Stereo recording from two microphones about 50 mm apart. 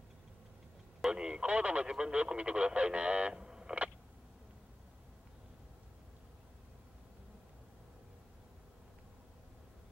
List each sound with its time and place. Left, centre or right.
1.1 s telephone: centre
1.5 s speech: right